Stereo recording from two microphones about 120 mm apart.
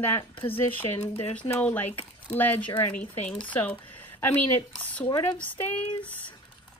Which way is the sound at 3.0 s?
10° left (ahead or behind).